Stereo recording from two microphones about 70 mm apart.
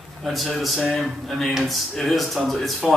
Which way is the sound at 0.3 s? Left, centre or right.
Centre.